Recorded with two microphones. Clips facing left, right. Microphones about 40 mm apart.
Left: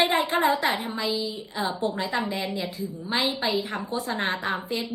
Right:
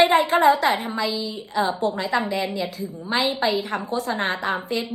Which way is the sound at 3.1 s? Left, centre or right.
Right.